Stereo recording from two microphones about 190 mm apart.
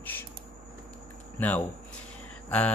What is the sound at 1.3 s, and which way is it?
Speech, 10° left (ahead or behind).